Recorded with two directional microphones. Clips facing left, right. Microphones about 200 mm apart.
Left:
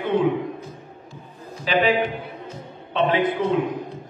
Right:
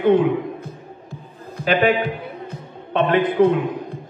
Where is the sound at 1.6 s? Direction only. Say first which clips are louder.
Right 3 dB; 60° right (ahead or behind).